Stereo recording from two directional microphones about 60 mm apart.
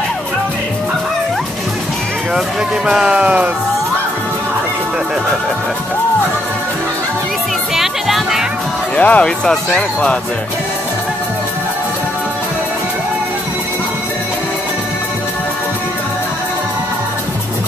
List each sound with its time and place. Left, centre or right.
2.9 s speech: centre
7.7 s music: centre
8.9 s speech: left
9.4 s speech: centre